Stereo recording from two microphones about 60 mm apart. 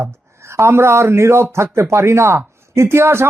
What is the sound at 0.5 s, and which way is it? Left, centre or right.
Speech, right.